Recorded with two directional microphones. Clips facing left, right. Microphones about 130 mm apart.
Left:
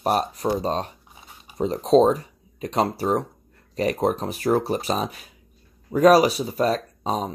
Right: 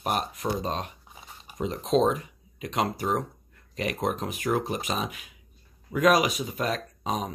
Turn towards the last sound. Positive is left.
turn(degrees=30)  # may be behind; listen again after turning